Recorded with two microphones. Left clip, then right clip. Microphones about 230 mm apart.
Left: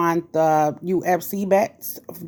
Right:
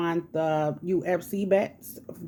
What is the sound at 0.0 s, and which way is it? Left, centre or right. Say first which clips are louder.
Speech: left 8 dB; left.